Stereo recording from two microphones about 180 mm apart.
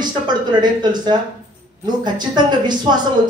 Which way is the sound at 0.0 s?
25° right (ahead or behind).